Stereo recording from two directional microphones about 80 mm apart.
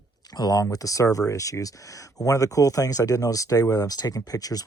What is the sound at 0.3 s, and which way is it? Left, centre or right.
Speech, left.